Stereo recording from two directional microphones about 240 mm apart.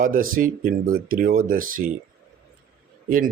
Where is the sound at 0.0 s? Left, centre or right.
Right.